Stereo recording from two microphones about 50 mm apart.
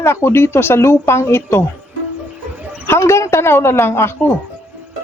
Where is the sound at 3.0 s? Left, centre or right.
Left.